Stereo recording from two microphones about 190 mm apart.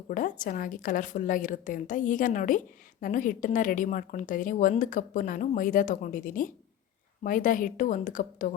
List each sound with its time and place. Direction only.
0.1 s a woman's voice: 45° left (ahead or behind)